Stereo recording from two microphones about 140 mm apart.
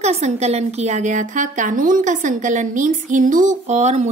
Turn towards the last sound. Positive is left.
turn(degrees=-55)  # may be behind; listen again after turning